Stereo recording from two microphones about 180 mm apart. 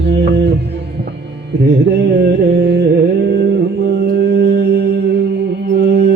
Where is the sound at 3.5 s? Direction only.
65° right (ahead or behind).